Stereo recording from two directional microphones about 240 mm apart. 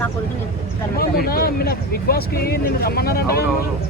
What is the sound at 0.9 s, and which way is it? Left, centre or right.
Speech, left.